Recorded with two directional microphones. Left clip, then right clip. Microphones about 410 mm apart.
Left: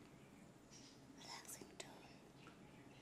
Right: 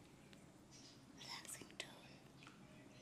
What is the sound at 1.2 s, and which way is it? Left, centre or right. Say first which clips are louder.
Whispering: right 2 dB; centre.